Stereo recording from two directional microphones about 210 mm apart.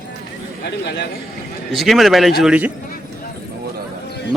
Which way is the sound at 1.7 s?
Centre (ahead or behind).